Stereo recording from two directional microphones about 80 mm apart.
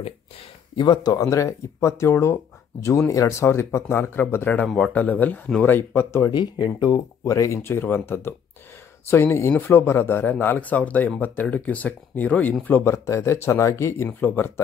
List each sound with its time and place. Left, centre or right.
0.7 s speech: left
1.1 s speech: left
6.3 s speech: left
7.2 s speech: left
12.6 s speech: left
14.0 s speech: left